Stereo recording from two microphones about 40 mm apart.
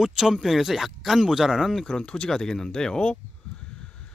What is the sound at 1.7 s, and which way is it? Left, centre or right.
Speech, centre.